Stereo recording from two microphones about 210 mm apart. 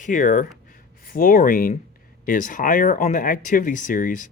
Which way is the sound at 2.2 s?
40° left (ahead or behind).